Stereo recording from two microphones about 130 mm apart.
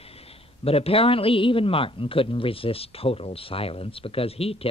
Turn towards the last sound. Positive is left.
turn(degrees=50)  # may be behind; listen again after turning